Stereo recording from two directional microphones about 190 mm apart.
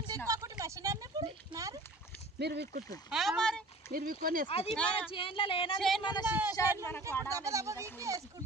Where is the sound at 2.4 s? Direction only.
60° right (ahead or behind).